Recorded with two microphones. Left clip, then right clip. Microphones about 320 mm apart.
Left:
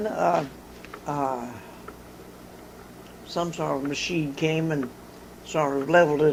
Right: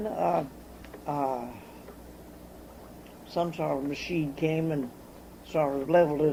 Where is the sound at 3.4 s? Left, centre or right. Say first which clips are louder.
Left 2 dB; centre.